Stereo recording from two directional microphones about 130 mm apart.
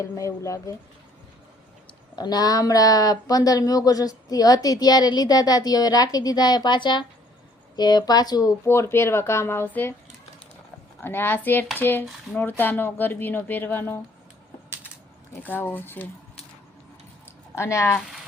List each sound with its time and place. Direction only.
0.0 s speech: 25° left (ahead or behind)
2.1 s speech: 30° left (ahead or behind); by 9.9 s 15° left (ahead or behind)
11.0 s speech: 15° left (ahead or behind)
15.4 s speech: 15° left (ahead or behind)
17.5 s speech: 20° left (ahead or behind)